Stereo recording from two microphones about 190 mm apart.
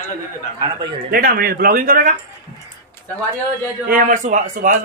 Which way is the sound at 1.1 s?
50° right (ahead or behind).